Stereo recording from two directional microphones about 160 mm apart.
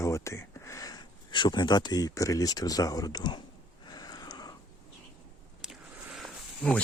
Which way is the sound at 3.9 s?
25° left (ahead or behind).